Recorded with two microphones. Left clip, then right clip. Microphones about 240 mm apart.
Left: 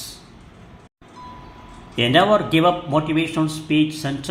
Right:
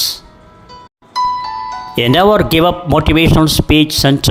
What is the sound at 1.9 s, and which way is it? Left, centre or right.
Speech, right.